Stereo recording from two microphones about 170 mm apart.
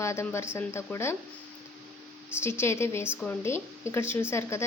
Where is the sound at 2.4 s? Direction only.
15° left (ahead or behind).